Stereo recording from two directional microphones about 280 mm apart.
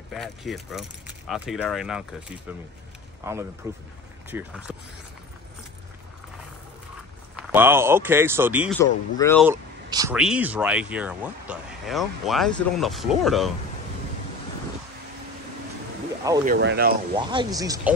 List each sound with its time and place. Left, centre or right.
0.1 s speech: centre
7.3 s speech: centre
8.7 s speech: centre
9.4 s speech: centre
16.4 s speech: right
17.3 s speech: centre